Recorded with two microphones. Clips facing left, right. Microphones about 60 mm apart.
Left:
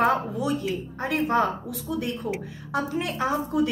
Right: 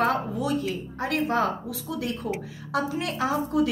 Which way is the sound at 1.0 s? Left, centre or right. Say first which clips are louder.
Left 1 dB; centre.